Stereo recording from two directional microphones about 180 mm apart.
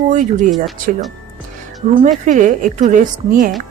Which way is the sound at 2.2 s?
45° right (ahead or behind).